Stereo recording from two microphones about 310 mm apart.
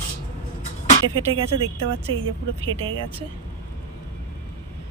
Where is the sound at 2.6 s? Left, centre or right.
Centre.